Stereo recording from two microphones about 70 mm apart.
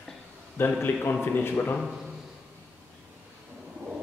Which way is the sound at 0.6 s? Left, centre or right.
Left.